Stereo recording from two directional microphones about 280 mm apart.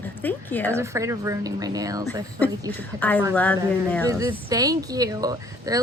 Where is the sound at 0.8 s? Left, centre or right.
Centre.